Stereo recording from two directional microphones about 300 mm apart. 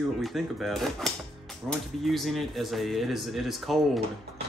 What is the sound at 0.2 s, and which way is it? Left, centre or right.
Speech, centre.